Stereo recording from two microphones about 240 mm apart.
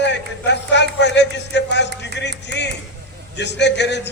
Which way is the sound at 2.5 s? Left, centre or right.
Left.